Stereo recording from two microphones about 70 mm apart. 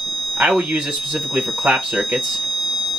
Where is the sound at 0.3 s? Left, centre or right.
Centre.